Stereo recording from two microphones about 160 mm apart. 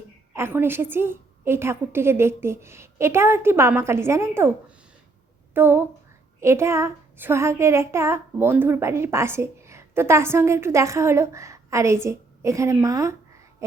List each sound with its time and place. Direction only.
0.3 s a child's voice: 15° right (ahead or behind)
5.5 s a child's voice: 15° right (ahead or behind)
13.6 s a sound: 20° right (ahead or behind)